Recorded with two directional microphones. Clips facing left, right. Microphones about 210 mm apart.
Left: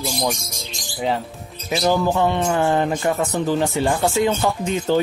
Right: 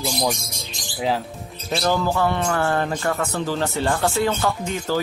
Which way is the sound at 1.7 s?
15° left (ahead or behind).